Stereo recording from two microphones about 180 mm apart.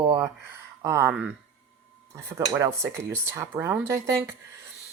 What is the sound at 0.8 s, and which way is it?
Cutlery, 15° right (ahead or behind).